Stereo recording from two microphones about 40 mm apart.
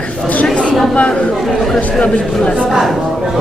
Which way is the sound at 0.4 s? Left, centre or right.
Centre.